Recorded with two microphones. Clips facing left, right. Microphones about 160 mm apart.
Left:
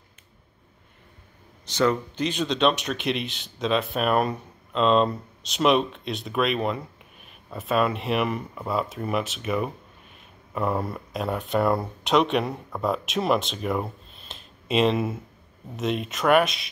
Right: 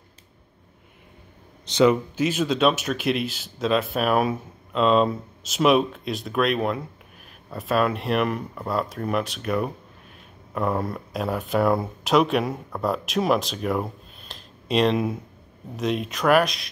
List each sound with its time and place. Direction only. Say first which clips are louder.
1.7 s speech: right 5 dB; 15° right (ahead or behind)
2.1 s speech: right 3 dB; 5° right (ahead or behind)